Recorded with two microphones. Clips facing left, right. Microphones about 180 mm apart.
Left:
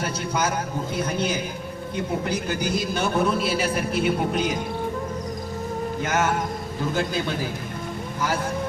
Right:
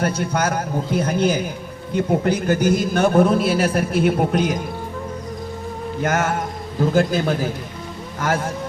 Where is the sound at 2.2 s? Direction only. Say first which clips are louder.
Right 8 dB; 50° right (ahead or behind).